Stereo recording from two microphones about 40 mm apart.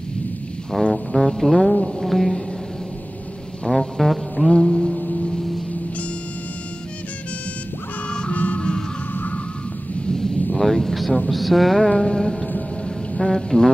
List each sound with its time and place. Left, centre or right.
0.9 s music: centre
3.6 s music: centre
4.6 s a sound: centre
5.1 s gong: centre
8.3 s music: left
10.0 s vehicle: centre
11.2 s speech: centre
12.0 s a sound: centre
12.8 s music: centre